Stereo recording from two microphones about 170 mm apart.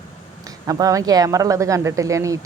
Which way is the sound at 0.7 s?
20° right (ahead or behind).